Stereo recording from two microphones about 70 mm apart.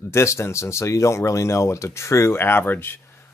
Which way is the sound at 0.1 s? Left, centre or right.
Left.